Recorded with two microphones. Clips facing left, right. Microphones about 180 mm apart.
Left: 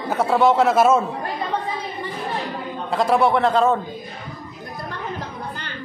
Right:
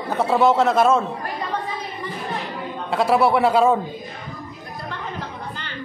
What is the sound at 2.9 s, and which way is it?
Speech, 5° right (ahead or behind).